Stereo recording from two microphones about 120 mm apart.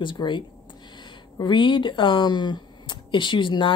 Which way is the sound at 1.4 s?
40° left (ahead or behind).